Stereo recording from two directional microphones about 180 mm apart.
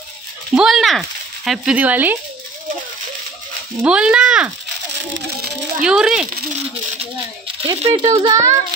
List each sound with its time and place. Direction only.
0.6 s speech: centre (ahead or behind)
3.8 s speech: 5° right (ahead or behind)
5.9 s speech: 5° right (ahead or behind)
7.0 s a child's voice: 30° right (ahead or behind)